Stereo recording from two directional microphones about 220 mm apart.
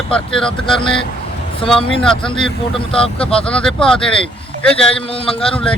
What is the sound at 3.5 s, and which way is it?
Speech, 5° left (ahead or behind).